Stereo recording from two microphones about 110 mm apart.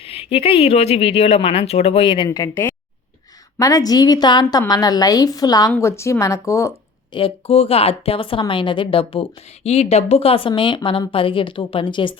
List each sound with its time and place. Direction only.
0.0 s a woman's voice: 65° left (ahead or behind)
2.2 s a woman's voice: 40° left (ahead or behind)
7.1 s a woman's voice: 55° left (ahead or behind)